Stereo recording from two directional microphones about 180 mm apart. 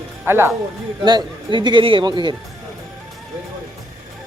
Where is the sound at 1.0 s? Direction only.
25° right (ahead or behind).